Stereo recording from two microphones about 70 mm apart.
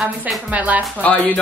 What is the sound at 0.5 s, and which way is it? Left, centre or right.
Speech, right.